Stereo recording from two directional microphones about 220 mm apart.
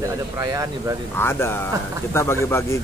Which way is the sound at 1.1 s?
10° left (ahead or behind).